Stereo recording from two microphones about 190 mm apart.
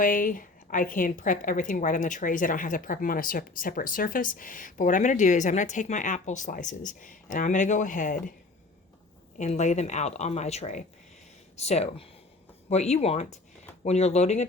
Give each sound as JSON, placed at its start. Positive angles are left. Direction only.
{"t": 0.0, "sound": "speech", "side_deg": 45}
{"t": 9.4, "sound": "speech", "side_deg": 40}